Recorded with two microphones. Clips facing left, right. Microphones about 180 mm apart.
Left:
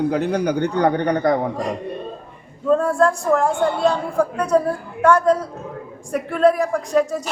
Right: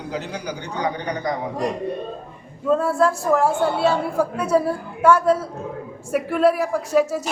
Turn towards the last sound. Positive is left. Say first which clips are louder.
# even
turn(degrees=-5)  # may be behind; listen again after turning